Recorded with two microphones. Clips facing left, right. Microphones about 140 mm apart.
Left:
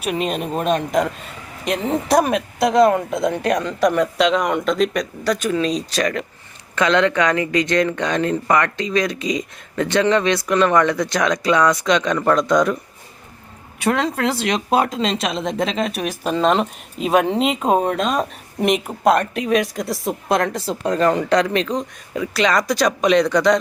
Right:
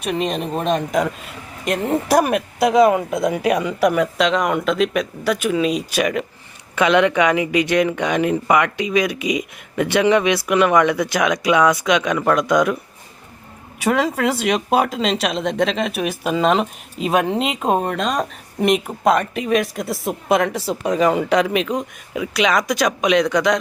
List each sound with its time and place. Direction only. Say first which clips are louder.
0.0 s speech: even; 5° left (ahead or behind)
13.8 s speech: right 1 dB; 5° right (ahead or behind)